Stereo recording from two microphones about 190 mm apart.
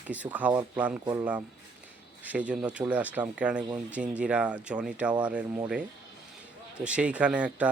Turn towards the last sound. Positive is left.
turn(degrees=-5)  # may be behind; listen again after turning